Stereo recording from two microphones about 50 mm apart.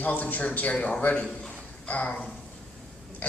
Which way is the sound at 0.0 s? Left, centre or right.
Left.